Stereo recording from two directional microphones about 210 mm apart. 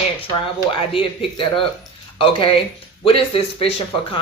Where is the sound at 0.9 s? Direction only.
25° left (ahead or behind).